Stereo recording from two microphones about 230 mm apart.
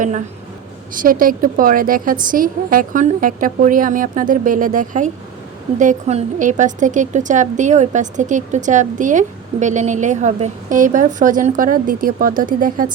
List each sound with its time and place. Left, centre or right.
0.9 s a woman's voice: right